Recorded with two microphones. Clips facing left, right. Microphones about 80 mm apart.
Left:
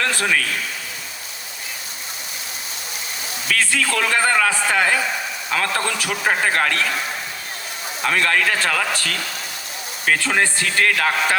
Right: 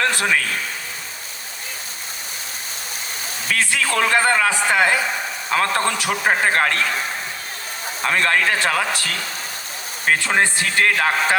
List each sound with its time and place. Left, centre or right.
0.0 s a man's voice: right
3.6 s a man's voice: right
8.0 s a man's voice: right